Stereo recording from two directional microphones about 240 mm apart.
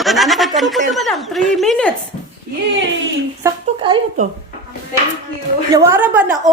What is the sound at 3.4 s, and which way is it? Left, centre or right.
Speech, centre.